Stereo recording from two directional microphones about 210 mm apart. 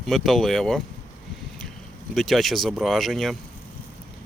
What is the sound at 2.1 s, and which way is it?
Speech, centre (ahead or behind).